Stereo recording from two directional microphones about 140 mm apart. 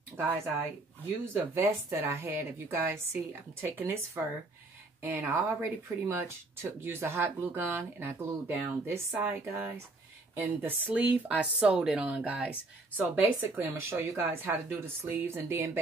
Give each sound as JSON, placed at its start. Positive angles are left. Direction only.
{"t": 1.2, "sound": "speech", "side_deg": -20}